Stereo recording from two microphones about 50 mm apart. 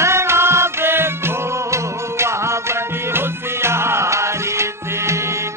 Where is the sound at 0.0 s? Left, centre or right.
Right.